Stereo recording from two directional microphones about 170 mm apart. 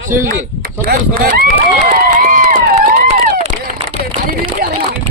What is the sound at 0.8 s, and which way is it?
Speech, 55° right (ahead or behind).